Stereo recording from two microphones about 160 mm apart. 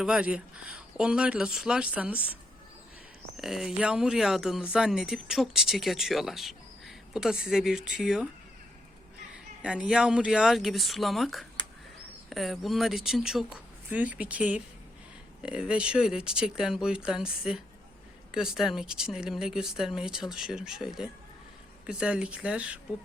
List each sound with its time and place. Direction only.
0.0 s speech: 5° right (ahead or behind)
3.3 s speech: centre (ahead or behind)
9.6 s speech: 5° right (ahead or behind)